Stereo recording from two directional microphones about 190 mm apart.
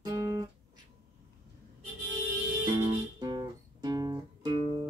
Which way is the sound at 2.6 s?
20° right (ahead or behind).